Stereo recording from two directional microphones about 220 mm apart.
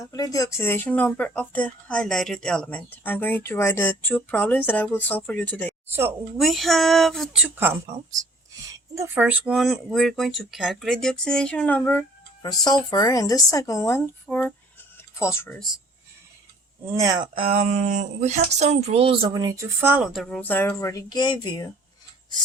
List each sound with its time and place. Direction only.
0.1 s speech: 15° left (ahead or behind)
5.9 s speech: 10° right (ahead or behind)
6.4 s speech: centre (ahead or behind)
9.0 s speech: 5° right (ahead or behind)
16.9 s speech: 15° right (ahead or behind); by 21.7 s 20° left (ahead or behind)